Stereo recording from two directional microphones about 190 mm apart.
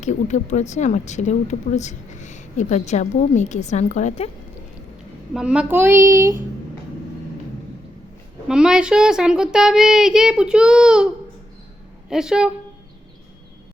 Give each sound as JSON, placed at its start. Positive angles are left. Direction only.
{"t": 0.0, "sound": "speech", "side_deg": 40}
{"t": 5.3, "sound": "a woman's voice", "side_deg": -5}
{"t": 8.4, "sound": "a child's voice", "side_deg": -5}